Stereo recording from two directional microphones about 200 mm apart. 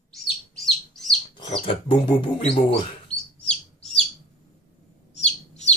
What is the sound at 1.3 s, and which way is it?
Bird, 25° left (ahead or behind).